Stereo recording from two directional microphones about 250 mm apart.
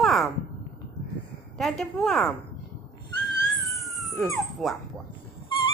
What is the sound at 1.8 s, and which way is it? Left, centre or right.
Speech, centre.